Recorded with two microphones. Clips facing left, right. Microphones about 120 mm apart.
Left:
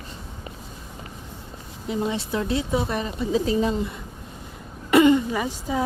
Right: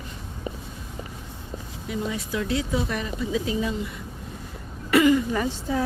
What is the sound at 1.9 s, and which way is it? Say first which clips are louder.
Speech: left 3 dB; 25° left (ahead or behind).